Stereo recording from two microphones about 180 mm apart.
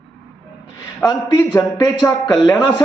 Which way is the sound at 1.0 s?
20° left (ahead or behind).